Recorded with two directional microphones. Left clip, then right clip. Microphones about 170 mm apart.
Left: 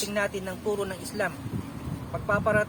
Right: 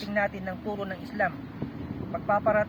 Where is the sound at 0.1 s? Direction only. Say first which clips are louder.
Even; 15° left (ahead or behind).